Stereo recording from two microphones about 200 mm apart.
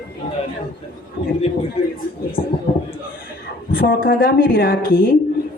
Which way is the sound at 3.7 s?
50° left (ahead or behind).